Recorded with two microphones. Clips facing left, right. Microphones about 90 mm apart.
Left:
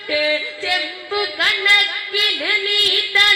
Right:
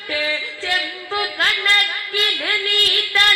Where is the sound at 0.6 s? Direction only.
40° right (ahead or behind).